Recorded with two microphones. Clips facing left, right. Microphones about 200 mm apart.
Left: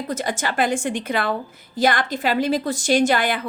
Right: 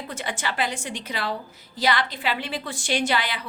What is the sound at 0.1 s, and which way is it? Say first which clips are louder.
A woman's voice: left 5 dB; 40° left (ahead or behind).